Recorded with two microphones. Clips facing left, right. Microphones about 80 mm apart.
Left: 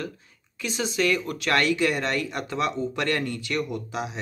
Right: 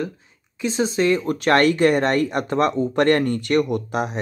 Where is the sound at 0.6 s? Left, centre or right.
Right.